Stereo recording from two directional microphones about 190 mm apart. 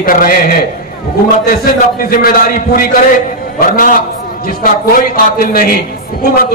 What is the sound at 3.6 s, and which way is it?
A man's voice, 50° left (ahead or behind).